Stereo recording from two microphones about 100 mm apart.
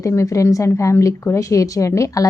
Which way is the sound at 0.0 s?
30° left (ahead or behind).